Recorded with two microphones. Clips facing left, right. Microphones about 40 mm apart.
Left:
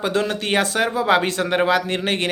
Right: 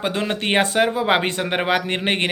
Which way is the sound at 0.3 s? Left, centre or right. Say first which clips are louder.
Right 1 dB; right.